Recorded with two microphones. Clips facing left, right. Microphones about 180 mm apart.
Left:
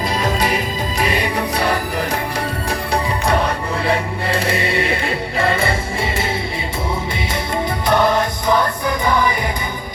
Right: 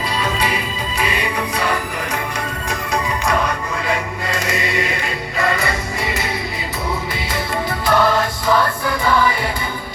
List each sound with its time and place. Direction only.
0.2 s music: 40° left (ahead or behind)
7.9 s music: 20° left (ahead or behind)